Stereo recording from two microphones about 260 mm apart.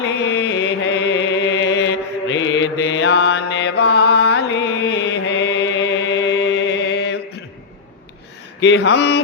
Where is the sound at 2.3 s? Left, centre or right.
Left.